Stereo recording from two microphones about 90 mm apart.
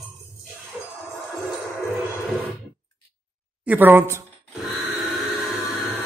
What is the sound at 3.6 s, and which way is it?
Speech, 20° right (ahead or behind).